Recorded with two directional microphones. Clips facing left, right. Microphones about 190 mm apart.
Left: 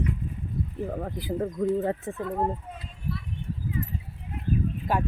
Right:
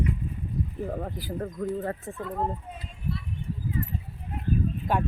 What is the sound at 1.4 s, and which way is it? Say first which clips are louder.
Speech: left 5 dB; 20° left (ahead or behind).